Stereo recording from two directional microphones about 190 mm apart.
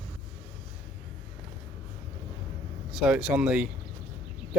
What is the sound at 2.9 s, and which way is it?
Speech, 5° right (ahead or behind).